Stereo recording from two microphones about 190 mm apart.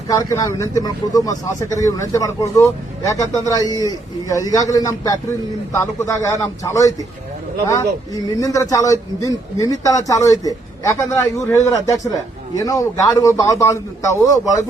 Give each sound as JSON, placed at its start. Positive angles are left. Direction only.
{"t": 0.3, "sound": "a man's voice", "side_deg": 15}